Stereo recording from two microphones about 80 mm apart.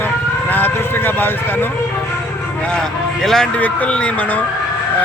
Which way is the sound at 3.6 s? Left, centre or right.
Centre.